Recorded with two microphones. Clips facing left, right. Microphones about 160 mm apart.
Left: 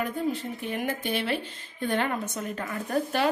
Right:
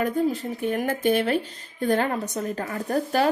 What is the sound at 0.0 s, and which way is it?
Speech, 40° right (ahead or behind).